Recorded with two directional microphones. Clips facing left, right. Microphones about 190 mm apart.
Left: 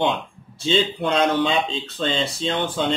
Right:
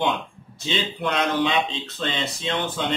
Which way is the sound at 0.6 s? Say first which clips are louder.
Left 5 dB; 30° left (ahead or behind).